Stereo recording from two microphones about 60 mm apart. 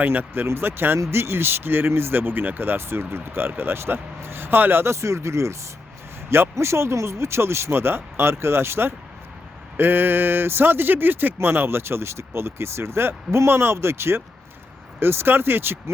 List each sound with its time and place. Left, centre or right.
0.0 s speech: right